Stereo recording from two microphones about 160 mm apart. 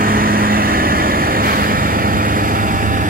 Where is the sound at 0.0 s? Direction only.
65° right (ahead or behind).